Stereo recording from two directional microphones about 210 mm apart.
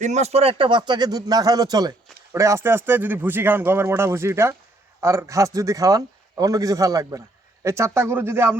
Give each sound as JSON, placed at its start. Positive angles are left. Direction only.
{"t": 0.0, "sound": "speech", "side_deg": -30}